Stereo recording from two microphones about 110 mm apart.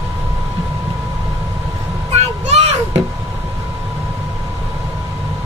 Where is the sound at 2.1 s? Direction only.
80° right.